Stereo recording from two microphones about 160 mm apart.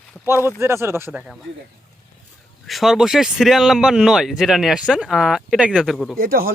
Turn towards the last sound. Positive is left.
turn(degrees=-65)  # may be behind; listen again after turning